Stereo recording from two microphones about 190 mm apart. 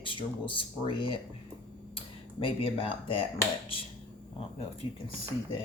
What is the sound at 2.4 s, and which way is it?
Speech, 30° left (ahead or behind).